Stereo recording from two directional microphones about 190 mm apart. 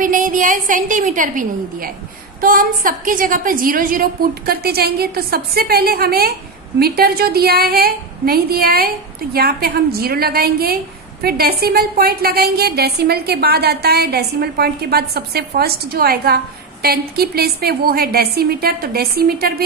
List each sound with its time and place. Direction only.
0.0 s a woman's voice: 45° right (ahead or behind)